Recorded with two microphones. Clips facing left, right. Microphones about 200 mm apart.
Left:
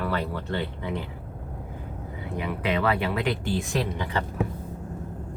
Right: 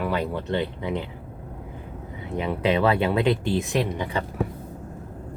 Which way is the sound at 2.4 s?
25° right (ahead or behind).